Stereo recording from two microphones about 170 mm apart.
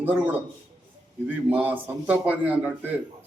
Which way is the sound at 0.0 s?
10° right (ahead or behind).